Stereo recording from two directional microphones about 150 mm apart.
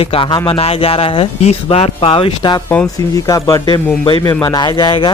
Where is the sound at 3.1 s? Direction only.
25° left (ahead or behind).